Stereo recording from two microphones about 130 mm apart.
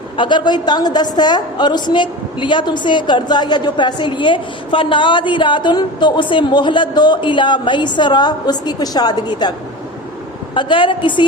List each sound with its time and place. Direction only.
0.2 s a woman's voice: 35° left (ahead or behind)